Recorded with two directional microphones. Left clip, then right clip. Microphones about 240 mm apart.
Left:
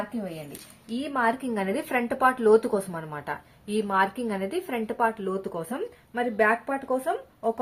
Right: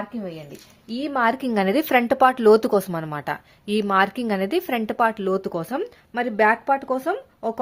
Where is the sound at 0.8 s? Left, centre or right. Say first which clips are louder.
Right 4 dB; right.